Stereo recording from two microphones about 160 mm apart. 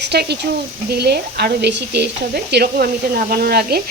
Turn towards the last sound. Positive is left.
turn(degrees=-75)  # may be behind; listen again after turning